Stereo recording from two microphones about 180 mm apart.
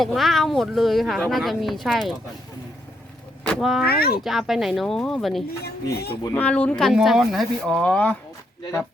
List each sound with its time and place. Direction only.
0.0 s speech: centre (ahead or behind)
3.4 s speech: centre (ahead or behind)
3.8 s speech: 60° left (ahead or behind)
4.2 s speech: centre (ahead or behind)
5.6 s speech: 60° left (ahead or behind)
6.2 s speech: 10° left (ahead or behind)